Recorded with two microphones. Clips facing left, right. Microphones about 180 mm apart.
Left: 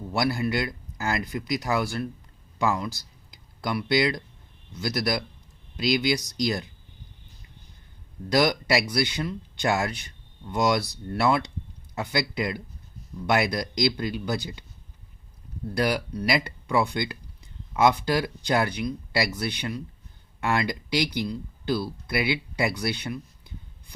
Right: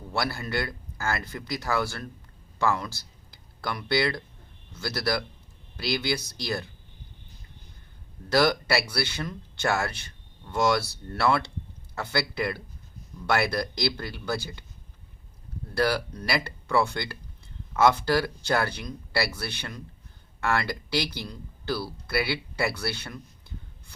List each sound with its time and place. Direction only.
0.1 s speech: 15° left (ahead or behind)
8.3 s speech: 15° left (ahead or behind)
15.7 s speech: 15° left (ahead or behind)